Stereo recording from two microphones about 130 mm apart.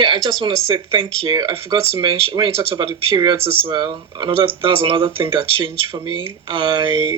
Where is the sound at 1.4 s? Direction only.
25° right (ahead or behind).